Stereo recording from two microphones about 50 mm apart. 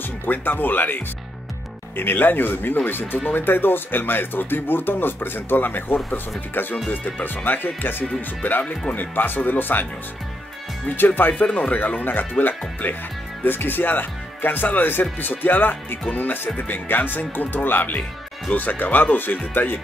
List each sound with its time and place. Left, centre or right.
0.2 s speech: left
11.0 s speech: left